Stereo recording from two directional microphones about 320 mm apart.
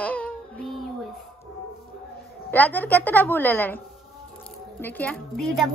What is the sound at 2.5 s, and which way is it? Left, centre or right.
Speech, centre.